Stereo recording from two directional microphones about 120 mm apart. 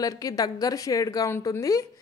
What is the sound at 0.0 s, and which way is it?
Speech, 30° left (ahead or behind).